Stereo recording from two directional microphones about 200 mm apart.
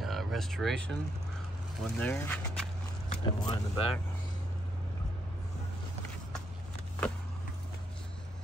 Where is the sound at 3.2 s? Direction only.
25° left (ahead or behind).